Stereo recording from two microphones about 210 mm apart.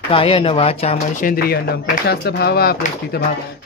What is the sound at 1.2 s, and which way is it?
Speech, 45° left (ahead or behind).